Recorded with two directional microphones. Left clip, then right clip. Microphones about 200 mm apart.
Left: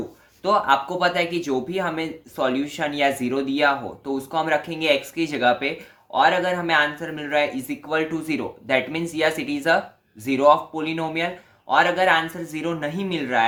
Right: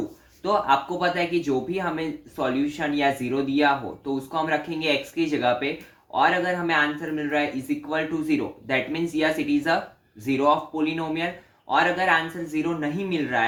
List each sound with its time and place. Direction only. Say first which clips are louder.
0.4 s speech: left 2 dB; 45° left (ahead or behind)